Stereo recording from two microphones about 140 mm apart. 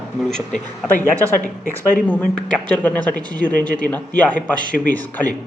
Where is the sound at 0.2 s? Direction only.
5° left (ahead or behind).